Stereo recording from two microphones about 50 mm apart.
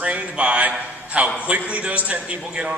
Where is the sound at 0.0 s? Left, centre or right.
Right.